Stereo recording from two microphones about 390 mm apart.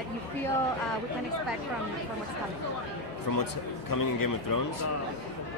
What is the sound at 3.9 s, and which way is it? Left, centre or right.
Speech, left.